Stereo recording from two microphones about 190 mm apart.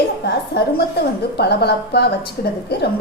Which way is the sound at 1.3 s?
60° left (ahead or behind).